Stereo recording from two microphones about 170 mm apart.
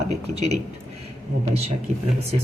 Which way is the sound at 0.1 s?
40° right (ahead or behind).